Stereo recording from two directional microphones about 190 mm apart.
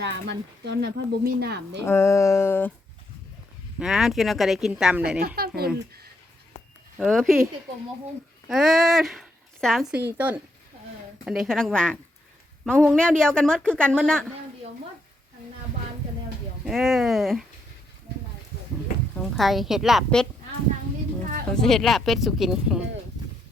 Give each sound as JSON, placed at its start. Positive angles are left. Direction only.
{"t": 0.0, "sound": "speech", "side_deg": -65}
{"t": 1.8, "sound": "speech", "side_deg": 15}
{"t": 3.8, "sound": "a woman's voice", "side_deg": -5}
{"t": 5.2, "sound": "speech", "side_deg": -55}
{"t": 7.0, "sound": "a woman's voice", "side_deg": 0}
{"t": 8.4, "sound": "a woman's voice", "side_deg": 0}
{"t": 16.6, "sound": "a woman's voice", "side_deg": 0}
{"t": 19.2, "sound": "a woman's voice", "side_deg": 0}
{"t": 21.5, "sound": "a woman's voice", "side_deg": 0}